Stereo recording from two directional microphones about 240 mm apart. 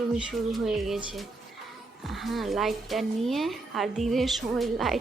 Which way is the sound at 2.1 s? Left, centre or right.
Centre.